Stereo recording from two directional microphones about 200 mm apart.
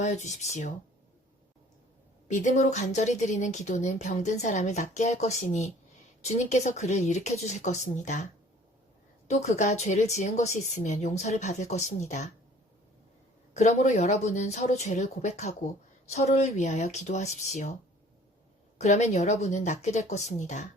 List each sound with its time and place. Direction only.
0.0 s speech: 35° left (ahead or behind)
2.2 s speech: 40° left (ahead or behind)
13.5 s speech: 35° left (ahead or behind)
18.8 s speech: 35° left (ahead or behind)